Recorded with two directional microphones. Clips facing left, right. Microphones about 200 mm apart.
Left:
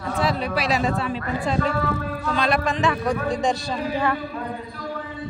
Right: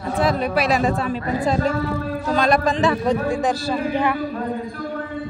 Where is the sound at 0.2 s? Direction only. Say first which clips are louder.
Right 4 dB; 50° right (ahead or behind); by 3.2 s 35° right (ahead or behind).